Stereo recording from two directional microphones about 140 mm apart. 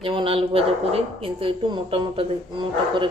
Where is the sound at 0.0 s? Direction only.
40° right (ahead or behind).